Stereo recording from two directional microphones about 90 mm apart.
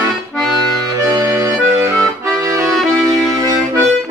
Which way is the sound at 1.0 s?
40° right (ahead or behind).